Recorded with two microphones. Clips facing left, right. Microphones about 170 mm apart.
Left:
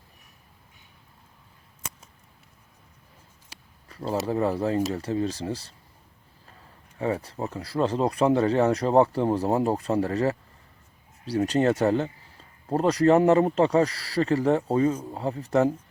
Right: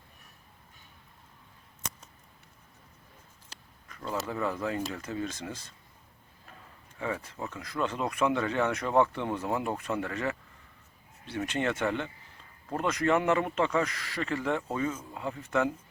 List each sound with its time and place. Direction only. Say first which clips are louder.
3.8 s speech: left 7 dB; 35° left (ahead or behind)
7.0 s speech: left 7 dB; 35° left (ahead or behind)